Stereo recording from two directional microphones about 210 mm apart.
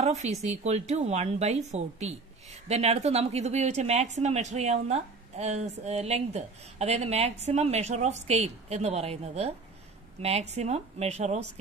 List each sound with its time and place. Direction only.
0.0 s speech: 30° right (ahead or behind)